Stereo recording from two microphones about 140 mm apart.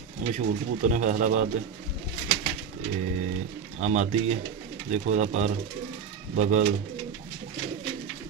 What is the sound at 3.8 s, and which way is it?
Speech, 55° right (ahead or behind).